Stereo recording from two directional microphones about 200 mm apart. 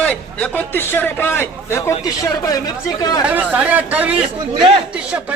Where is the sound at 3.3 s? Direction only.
5° right (ahead or behind).